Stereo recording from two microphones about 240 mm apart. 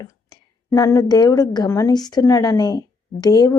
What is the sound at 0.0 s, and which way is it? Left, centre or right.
A woman's voice, centre.